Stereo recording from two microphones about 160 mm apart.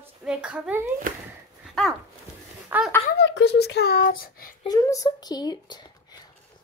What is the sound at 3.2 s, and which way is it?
A child's voice, 90° left.